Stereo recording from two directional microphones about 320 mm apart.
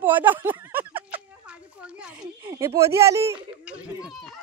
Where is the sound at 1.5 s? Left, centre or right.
Centre.